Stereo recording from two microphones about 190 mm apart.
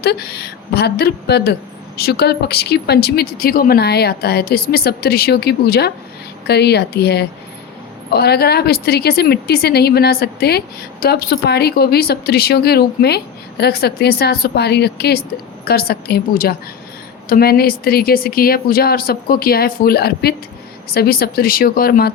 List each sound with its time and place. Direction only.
0.0 s speech: 60° left (ahead or behind)